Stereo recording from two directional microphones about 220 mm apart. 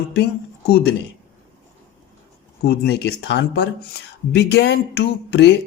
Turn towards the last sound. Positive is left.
turn(degrees=50)  # may be behind; listen again after turning